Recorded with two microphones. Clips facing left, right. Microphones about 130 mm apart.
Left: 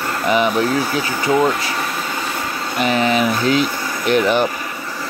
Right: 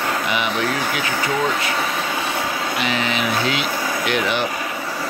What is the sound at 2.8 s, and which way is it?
Speech, 45° left (ahead or behind).